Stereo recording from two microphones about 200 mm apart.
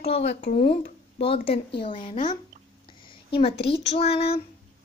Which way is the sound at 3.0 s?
25° left (ahead or behind).